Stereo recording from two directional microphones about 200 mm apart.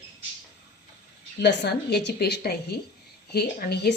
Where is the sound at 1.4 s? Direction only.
55° left (ahead or behind).